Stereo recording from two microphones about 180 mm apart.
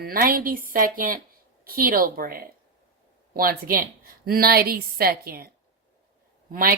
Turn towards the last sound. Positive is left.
turn(degrees=-50)  # may be behind; listen again after turning